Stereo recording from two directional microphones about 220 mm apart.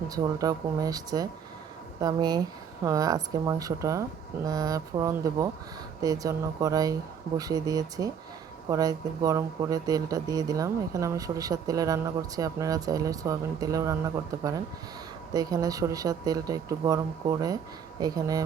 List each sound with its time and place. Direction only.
0.1 s speech: 15° right (ahead or behind)